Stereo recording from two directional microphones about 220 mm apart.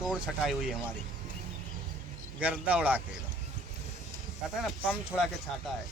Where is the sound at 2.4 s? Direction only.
5° right (ahead or behind).